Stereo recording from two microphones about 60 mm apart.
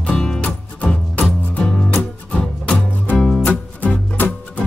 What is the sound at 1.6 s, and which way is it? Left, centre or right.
Music, centre.